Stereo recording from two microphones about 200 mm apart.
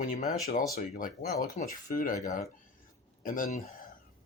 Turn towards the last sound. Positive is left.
turn(degrees=40)  # may be behind; listen again after turning